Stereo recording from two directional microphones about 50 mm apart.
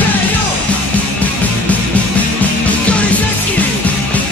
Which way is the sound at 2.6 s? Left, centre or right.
Left.